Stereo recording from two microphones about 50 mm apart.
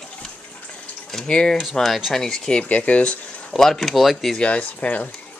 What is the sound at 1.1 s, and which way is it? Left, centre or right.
Speech, centre.